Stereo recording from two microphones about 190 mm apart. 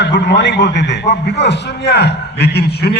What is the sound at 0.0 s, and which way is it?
A man's voice, 65° left (ahead or behind).